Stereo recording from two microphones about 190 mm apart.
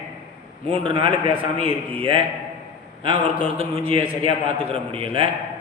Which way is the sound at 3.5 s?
30° right (ahead or behind).